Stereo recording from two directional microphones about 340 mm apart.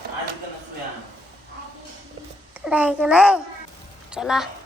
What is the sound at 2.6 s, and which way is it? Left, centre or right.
A child's voice, centre.